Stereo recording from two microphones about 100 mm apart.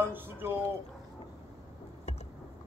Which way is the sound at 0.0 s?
20° right (ahead or behind).